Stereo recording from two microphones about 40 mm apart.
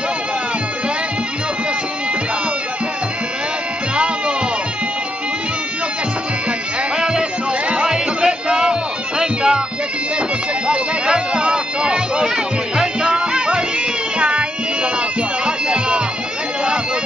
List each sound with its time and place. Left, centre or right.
7.0 s music: right
10.7 s bagpipes: right
12.7 s music: centre